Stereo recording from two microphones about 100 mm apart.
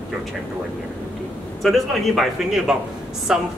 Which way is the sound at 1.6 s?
Centre (ahead or behind).